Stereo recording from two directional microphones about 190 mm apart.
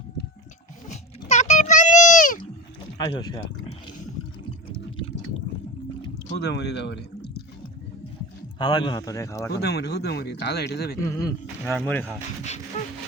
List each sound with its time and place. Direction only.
0.9 s a sound: 35° left (ahead or behind)
3.0 s speech: 20° left (ahead or behind)
6.4 s speech: 65° left (ahead or behind)
8.5 s speech: 25° left (ahead or behind)
9.5 s speech: 60° left (ahead or behind)
11.0 s speech: 15° left (ahead or behind)
11.6 s speech: 5° left (ahead or behind)